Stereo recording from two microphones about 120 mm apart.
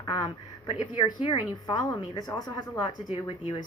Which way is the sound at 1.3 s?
30° left (ahead or behind).